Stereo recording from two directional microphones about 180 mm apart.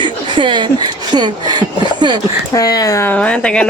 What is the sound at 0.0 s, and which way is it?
Speech, 25° right (ahead or behind).